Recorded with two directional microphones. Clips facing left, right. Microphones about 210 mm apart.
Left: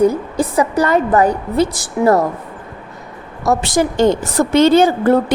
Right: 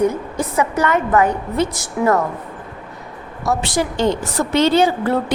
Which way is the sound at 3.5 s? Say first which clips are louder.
Left 4 dB; 45° left (ahead or behind).